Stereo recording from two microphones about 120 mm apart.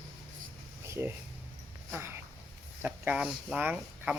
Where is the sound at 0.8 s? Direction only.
25° right (ahead or behind).